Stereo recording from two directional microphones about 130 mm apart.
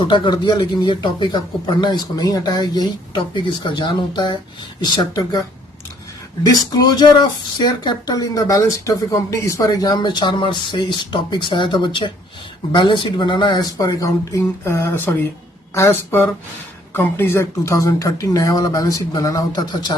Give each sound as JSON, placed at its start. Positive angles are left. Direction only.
{"t": 0.0, "sound": "speech", "side_deg": 40}
{"t": 6.5, "sound": "speech", "side_deg": 30}